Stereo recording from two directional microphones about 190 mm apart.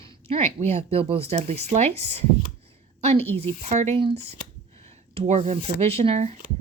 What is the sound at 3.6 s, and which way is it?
Speech, 35° right (ahead or behind).